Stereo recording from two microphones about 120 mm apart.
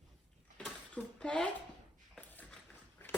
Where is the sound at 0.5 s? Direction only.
10° left (ahead or behind).